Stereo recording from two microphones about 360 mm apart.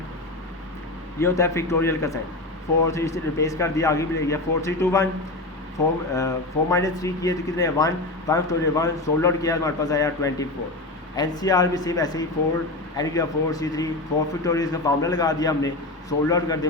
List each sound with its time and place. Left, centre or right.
1.2 s speech: centre
6.1 s speech: centre